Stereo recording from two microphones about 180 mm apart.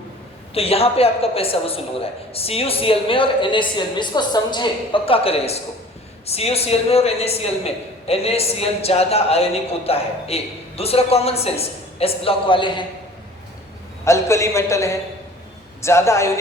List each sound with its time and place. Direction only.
0.5 s a man's voice: 35° left (ahead or behind)
14.0 s a man's voice: 15° left (ahead or behind)